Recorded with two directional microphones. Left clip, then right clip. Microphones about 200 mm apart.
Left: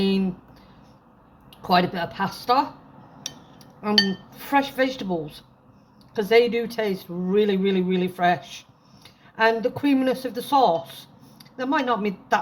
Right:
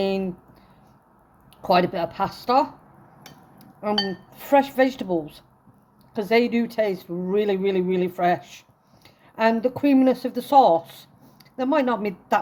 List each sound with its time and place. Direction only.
0.0 s speech: 45° right (ahead or behind)
1.6 s speech: 45° right (ahead or behind)
4.4 s speech: 50° right (ahead or behind)